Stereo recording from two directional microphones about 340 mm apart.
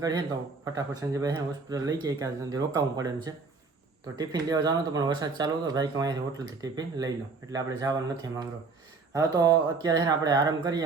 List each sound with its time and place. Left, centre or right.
0.0 s speech: centre
4.2 s speech: centre